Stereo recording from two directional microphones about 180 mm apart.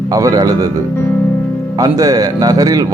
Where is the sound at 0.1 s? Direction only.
20° right (ahead or behind).